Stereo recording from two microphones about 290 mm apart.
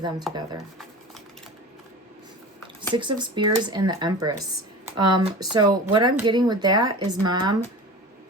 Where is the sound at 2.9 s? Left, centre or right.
Centre.